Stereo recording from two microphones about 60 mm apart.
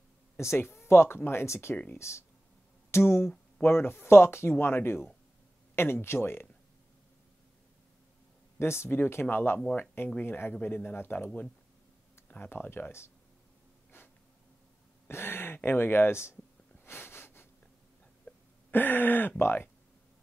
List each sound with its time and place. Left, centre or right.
0.4 s speech: left
8.5 s speech: left
11.2 s speech: centre
12.3 s speech: left
13.9 s a sound: left
15.0 s speech: left
16.8 s sniff: left
18.3 s throat clearing: left
18.7 s speech: left